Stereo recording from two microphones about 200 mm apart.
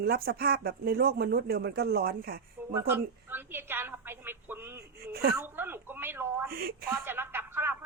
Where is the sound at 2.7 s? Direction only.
10° right (ahead or behind).